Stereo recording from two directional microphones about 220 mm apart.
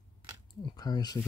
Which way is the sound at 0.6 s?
20° left (ahead or behind).